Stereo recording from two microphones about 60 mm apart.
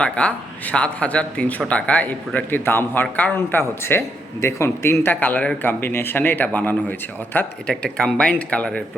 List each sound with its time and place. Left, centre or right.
0.0 s speech: left
3.3 s a man's voice: left
5.2 s speech: left
7.7 s speech: centre